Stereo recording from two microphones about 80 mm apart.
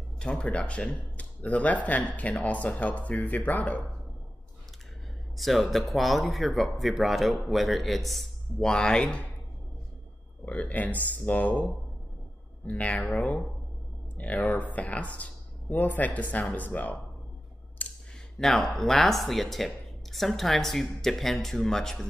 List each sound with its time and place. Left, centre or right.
0.2 s speech: centre
5.4 s speech: centre
10.4 s speech: centre
14.1 s speech: centre
18.4 s speech: centre